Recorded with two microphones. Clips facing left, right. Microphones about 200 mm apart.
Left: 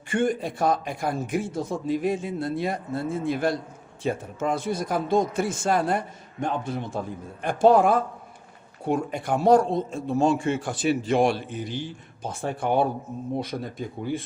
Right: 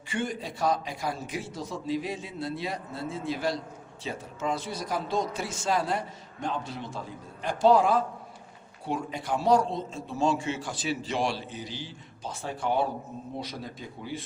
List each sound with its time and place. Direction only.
0.1 s a man's voice: 50° left (ahead or behind)